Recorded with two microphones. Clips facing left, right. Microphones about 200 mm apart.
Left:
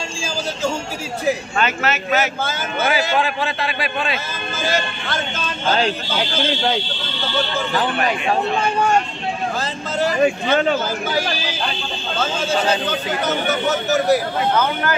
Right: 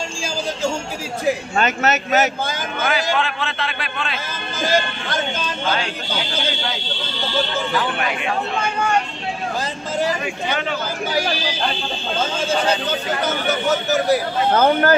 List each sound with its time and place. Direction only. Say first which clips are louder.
7.7 s speech: left 5 dB; 40° left (ahead or behind)
10.2 s speech: left 8 dB; 40° left (ahead or behind)
14.5 s speech: right 7 dB; 45° right (ahead or behind)